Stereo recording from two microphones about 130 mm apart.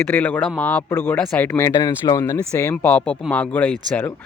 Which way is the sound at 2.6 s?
15° left (ahead or behind).